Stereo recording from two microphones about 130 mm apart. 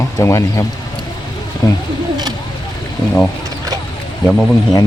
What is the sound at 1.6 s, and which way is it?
Speech, 25° left (ahead or behind).